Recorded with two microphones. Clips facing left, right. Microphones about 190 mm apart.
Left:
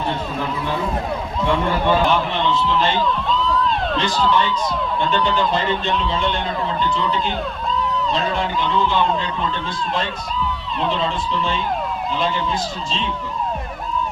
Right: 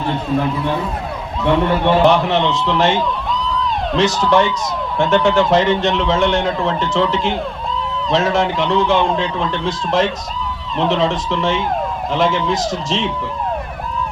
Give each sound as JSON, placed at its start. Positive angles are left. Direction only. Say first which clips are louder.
{"t": 2.0, "sound": "a man's voice", "louder": "right 6 dB", "side_deg": -80}